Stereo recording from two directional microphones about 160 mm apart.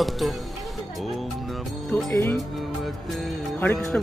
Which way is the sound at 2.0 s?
15° left (ahead or behind).